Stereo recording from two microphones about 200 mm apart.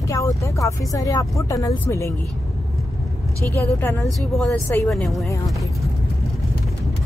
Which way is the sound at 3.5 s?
15° left (ahead or behind).